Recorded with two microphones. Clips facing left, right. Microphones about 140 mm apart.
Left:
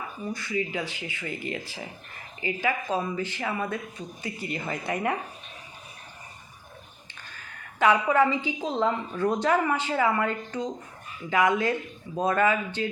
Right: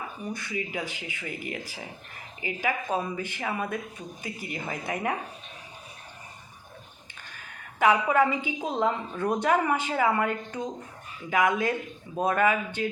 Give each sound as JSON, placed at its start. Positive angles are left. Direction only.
{"t": 0.2, "sound": "speech", "side_deg": -15}
{"t": 7.8, "sound": "speech", "side_deg": -15}